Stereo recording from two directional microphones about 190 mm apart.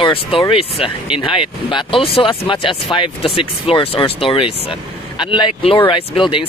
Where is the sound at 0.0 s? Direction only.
25° left (ahead or behind).